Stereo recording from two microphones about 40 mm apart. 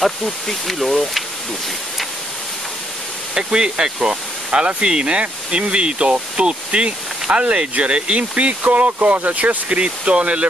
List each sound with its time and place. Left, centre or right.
0.0 s speech: centre
3.3 s speech: right
9.7 s speech: right